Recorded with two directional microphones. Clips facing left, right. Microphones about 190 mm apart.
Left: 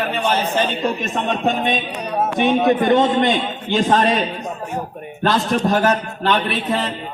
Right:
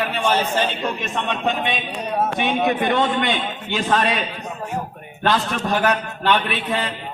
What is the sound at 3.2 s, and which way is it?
A man's voice, 35° left (ahead or behind).